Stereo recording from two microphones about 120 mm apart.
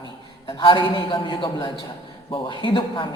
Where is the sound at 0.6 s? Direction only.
45° left (ahead or behind).